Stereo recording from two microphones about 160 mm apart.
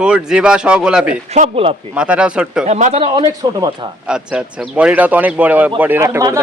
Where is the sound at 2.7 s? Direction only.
45° right (ahead or behind).